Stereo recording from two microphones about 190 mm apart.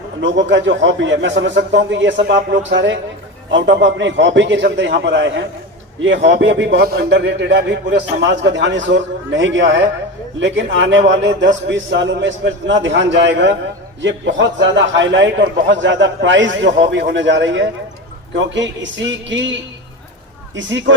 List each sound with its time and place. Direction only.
0.2 s a man's voice: 70° right (ahead or behind)
20.6 s a man's voice: 75° right (ahead or behind)